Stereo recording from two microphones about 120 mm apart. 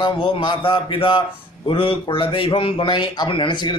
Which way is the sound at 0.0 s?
45° left (ahead or behind).